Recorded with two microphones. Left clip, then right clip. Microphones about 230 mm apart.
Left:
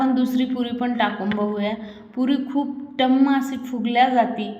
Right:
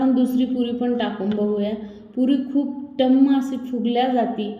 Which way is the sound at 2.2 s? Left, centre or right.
Centre.